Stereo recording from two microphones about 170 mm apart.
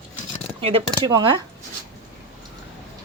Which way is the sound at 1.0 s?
30° right (ahead or behind).